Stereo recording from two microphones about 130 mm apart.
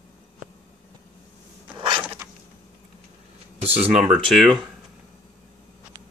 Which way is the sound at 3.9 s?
55° right (ahead or behind).